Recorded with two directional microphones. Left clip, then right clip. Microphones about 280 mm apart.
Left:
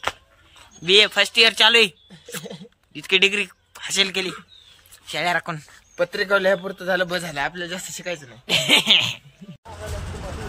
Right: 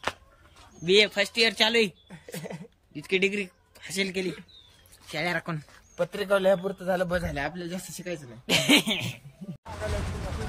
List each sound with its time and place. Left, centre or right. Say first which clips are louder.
0.8 s speech: left 6 dB; centre
6.2 s a man's voice: left 3 dB; right
7.2 s speech: left 6 dB; centre
8.5 s speech: left 5 dB; centre